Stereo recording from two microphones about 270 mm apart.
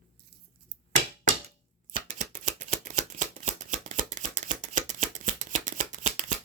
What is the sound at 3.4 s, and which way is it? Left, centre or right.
Scissors, right.